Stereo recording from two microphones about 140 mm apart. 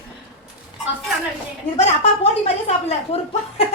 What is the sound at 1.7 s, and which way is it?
Speech, 50° left (ahead or behind).